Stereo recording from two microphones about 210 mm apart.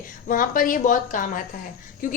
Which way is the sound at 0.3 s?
40° left (ahead or behind).